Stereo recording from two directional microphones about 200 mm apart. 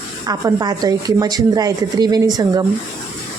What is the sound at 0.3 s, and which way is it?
Speech, 20° right (ahead or behind).